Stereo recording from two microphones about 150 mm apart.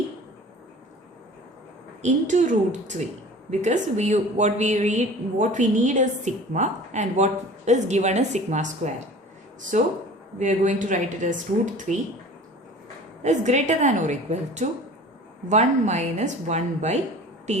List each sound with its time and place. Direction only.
2.0 s a woman's voice: 55° right (ahead or behind)
13.2 s a woman's voice: 50° right (ahead or behind)